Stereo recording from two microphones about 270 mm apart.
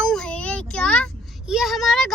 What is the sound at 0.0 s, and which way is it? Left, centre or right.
Child singing, centre.